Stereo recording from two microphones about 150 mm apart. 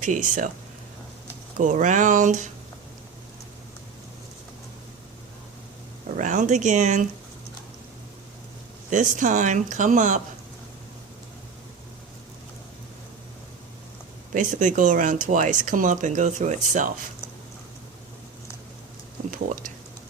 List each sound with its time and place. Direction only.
0.0 s speech: 55° right (ahead or behind)
1.5 s speech: 60° right (ahead or behind)
6.1 s speech: 55° right (ahead or behind)
8.9 s speech: 55° right (ahead or behind)
14.3 s speech: 55° right (ahead or behind)